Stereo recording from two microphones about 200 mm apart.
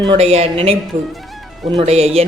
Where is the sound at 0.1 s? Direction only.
30° right (ahead or behind).